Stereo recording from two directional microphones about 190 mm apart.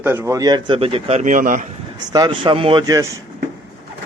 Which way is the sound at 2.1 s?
25° right (ahead or behind).